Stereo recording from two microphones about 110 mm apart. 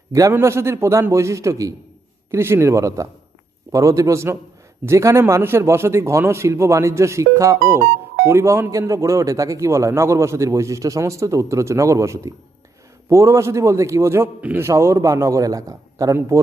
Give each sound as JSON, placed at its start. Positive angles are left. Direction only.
{"t": 0.1, "sound": "a man's voice", "side_deg": -25}
{"t": 14.7, "sound": "a man's voice", "side_deg": -30}